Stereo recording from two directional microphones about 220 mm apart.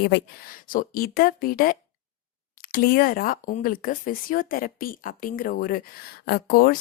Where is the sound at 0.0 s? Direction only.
45° left (ahead or behind).